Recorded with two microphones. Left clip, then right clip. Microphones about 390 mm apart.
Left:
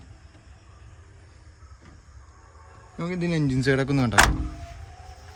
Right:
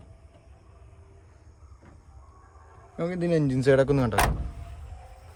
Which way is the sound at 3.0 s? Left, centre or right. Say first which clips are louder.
Right 2 dB; centre.